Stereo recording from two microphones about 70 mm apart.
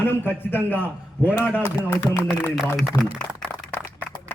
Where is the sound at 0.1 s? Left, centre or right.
Left.